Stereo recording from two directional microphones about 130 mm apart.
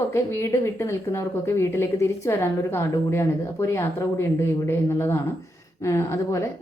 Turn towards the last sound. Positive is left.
turn(degrees=25)  # may be behind; listen again after turning